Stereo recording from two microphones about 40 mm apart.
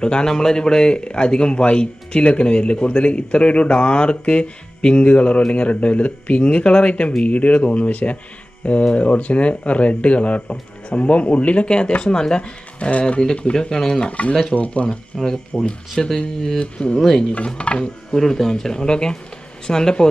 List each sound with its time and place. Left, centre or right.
0.0 s speech: centre
13.2 s speech: left
14.0 s speech: left
15.1 s speech: centre
16.5 s speech: left
18.1 s speech: centre